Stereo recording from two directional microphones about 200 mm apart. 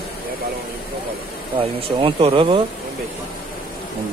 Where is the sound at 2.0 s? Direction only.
25° right (ahead or behind).